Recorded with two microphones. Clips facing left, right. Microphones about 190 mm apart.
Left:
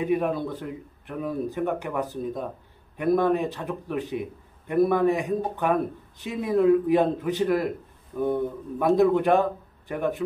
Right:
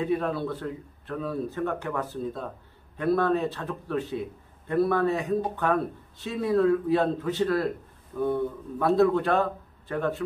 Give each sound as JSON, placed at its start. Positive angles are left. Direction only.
{"t": 0.0, "sound": "a man's voice", "side_deg": 15}